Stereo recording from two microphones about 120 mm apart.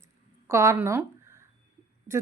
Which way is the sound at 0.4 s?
25° right (ahead or behind).